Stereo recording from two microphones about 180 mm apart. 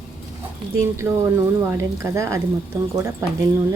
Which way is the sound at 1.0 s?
15° right (ahead or behind).